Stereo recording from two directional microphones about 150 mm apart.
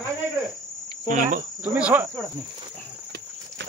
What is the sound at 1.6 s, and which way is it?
Speech, 10° right (ahead or behind).